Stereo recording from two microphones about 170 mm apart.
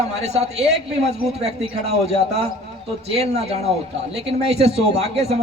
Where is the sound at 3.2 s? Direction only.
40° right (ahead or behind).